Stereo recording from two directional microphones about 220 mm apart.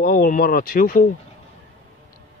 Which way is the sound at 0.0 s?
40° left (ahead or behind).